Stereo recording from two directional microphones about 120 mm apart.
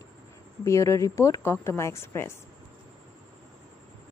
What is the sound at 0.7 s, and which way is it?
A woman's voice, 25° left (ahead or behind).